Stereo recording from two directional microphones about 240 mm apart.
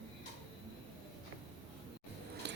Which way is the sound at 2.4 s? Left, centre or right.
Right.